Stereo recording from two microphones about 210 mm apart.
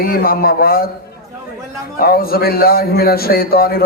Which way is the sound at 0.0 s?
45° left (ahead or behind).